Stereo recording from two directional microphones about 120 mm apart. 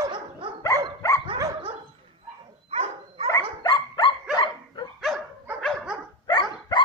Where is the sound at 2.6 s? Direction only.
55° right (ahead or behind).